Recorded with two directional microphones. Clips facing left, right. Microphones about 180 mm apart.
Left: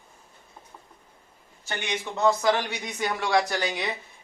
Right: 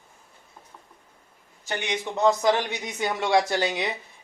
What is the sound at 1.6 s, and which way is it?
Speech, 20° right (ahead or behind).